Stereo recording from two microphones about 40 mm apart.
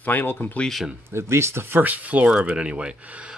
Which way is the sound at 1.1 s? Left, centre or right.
Right.